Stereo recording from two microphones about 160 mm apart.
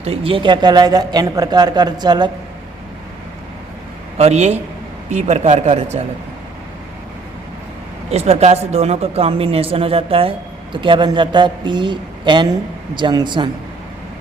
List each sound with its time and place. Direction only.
0.0 s speech: 35° right (ahead or behind)
4.2 s speech: 45° right (ahead or behind)
8.1 s speech: 40° right (ahead or behind)